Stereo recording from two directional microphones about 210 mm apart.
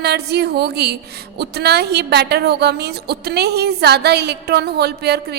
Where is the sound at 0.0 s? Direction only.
50° right (ahead or behind).